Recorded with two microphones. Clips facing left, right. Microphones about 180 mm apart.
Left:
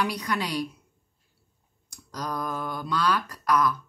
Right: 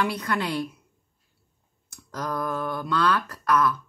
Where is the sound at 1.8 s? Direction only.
15° left (ahead or behind).